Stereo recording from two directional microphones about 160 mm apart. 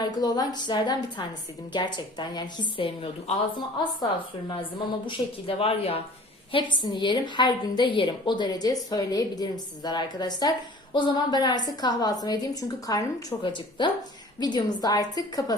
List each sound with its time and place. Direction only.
0.0 s a woman's voice: 25° left (ahead or behind)
5.0 s a woman's voice: 35° left (ahead or behind)